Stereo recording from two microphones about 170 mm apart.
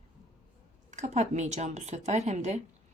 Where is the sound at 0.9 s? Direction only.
45° right (ahead or behind).